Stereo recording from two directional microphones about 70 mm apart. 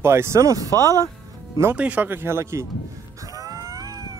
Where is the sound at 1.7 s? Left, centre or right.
Centre; by 2.6 s right.